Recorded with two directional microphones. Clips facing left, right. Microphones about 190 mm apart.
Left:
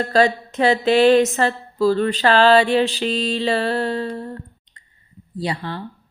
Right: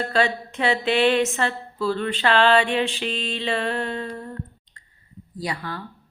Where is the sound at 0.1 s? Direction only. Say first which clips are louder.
Left 5 dB; 40° left (ahead or behind).